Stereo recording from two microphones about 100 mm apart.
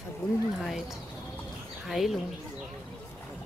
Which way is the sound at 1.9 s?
Centre (ahead or behind).